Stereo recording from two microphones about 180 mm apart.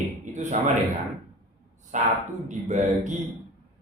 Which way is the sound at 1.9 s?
45° right (ahead or behind).